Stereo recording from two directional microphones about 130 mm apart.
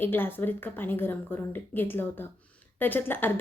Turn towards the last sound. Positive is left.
turn(degrees=15)  # may be behind; listen again after turning